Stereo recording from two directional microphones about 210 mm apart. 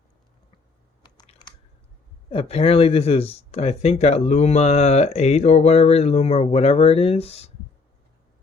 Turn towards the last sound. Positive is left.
turn(degrees=30)  # may be behind; listen again after turning